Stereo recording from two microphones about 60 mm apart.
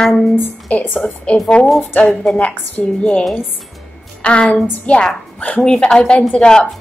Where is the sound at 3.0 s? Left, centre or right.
Left.